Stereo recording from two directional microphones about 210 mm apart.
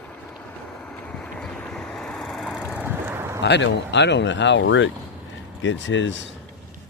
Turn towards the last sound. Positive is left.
turn(degrees=60)  # may be behind; listen again after turning